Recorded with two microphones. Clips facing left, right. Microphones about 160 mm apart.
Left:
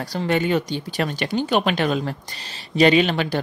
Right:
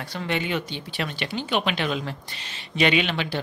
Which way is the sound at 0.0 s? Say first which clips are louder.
Left 6 dB; 40° left (ahead or behind).